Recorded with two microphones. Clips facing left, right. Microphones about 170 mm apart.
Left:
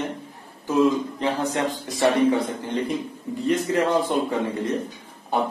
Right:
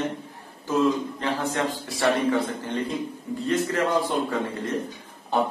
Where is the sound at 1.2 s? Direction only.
20° left (ahead or behind).